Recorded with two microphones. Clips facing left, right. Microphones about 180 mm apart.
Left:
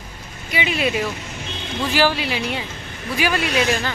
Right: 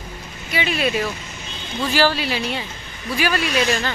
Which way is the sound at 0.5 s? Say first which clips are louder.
Even; 15° left (ahead or behind).